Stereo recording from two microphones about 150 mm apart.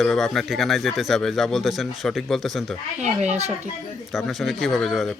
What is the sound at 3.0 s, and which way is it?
Speech, 50° right (ahead or behind).